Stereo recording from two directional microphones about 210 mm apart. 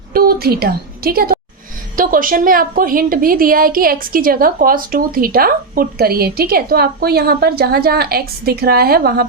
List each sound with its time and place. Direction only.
0.1 s a woman's voice: 45° right (ahead or behind)